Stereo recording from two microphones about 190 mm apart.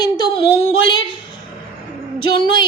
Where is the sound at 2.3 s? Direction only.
25° left (ahead or behind).